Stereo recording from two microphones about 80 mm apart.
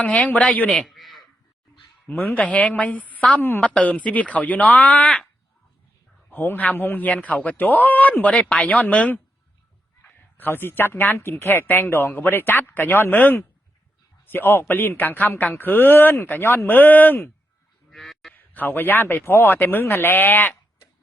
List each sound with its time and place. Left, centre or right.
0.2 s speech: centre
0.7 s a sound: centre
2.0 s speech: left
6.3 s speech: left
17.9 s honk: centre
18.3 s speech: left